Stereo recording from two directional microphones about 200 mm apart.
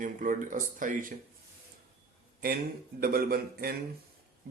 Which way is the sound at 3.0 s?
50° right (ahead or behind).